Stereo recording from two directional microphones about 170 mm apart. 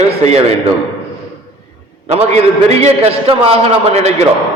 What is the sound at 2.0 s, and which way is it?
A man's voice, 40° right (ahead or behind).